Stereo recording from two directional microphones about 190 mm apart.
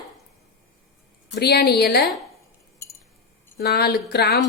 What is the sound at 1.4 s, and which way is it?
Speech, 55° left (ahead or behind).